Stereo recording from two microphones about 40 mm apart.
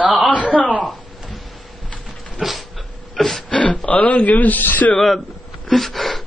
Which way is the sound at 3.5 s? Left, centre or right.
Left.